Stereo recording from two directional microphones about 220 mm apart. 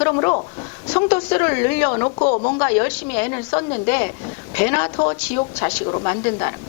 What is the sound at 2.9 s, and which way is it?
Speech, 10° left (ahead or behind).